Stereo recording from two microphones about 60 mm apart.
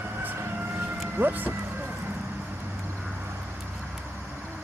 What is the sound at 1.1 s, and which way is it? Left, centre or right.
Vehicle, right.